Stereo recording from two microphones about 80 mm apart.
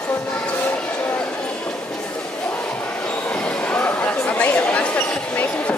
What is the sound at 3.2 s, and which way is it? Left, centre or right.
Chatter, centre.